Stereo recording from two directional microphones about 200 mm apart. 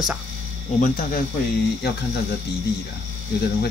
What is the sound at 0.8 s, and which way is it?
Speech, 45° left (ahead or behind).